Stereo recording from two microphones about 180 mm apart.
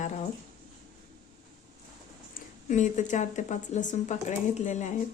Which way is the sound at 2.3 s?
45° left (ahead or behind).